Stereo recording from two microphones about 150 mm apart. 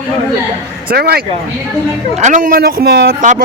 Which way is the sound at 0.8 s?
90° right.